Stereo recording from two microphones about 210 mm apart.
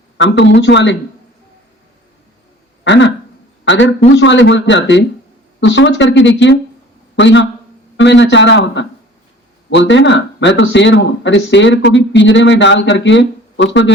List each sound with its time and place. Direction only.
0.2 s speech: 60° left (ahead or behind)
2.8 s a sound: 55° left (ahead or behind)
3.6 s speech: 60° left (ahead or behind)